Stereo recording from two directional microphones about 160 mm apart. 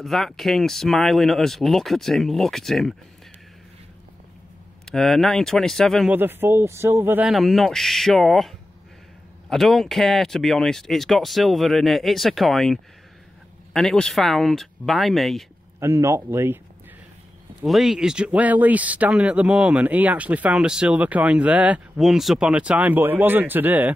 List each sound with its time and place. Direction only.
0.0 s speech: centre (ahead or behind)
4.8 s speech: 5° left (ahead or behind)
6.1 s speech: 15° right (ahead or behind)
15.8 s speech: 20° right (ahead or behind)
17.6 s speech: centre (ahead or behind)